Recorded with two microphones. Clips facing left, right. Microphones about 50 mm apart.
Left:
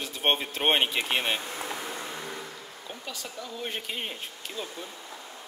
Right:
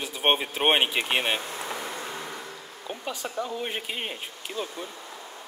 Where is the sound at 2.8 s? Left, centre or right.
Right.